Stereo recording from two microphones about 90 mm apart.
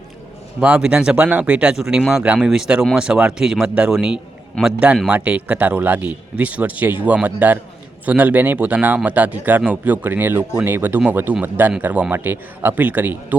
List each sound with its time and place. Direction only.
0.6 s speech: 15° right (ahead or behind)